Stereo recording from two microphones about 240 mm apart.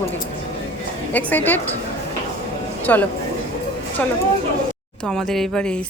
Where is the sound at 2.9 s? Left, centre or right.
Centre.